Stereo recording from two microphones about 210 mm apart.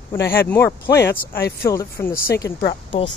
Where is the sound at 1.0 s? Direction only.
50° left (ahead or behind).